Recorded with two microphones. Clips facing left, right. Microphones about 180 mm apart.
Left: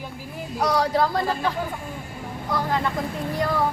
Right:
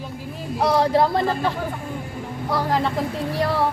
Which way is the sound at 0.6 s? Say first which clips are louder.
Right 3 dB; 25° right (ahead or behind).